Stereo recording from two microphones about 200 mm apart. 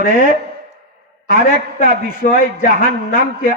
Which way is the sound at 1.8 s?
40° left (ahead or behind).